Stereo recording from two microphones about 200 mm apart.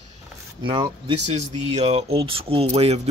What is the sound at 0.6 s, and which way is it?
Speech, 25° right (ahead or behind).